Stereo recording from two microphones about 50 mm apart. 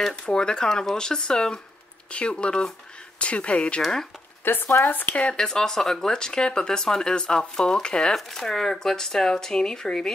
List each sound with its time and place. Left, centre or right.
0.1 s speech: centre
3.8 s speech: centre
4.5 s speech: left
4.8 s speech: left
5.3 s speech: centre